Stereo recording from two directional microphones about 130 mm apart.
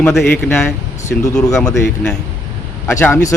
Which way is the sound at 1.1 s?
10° left (ahead or behind).